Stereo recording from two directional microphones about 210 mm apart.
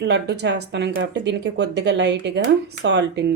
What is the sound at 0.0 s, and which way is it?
Speech, 55° right (ahead or behind).